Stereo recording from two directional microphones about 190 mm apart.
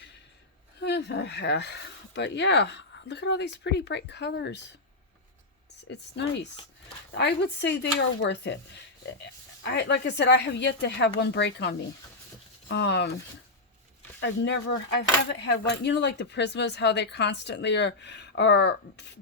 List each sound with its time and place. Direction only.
0.8 s speech: 65° left (ahead or behind)
5.9 s speech: 65° left (ahead or behind)
14.2 s speech: 65° left (ahead or behind)